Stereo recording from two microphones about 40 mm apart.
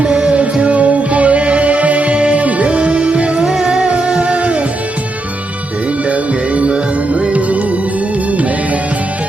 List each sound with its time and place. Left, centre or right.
0.6 s music: right
3.4 s music: centre
6.1 s music: right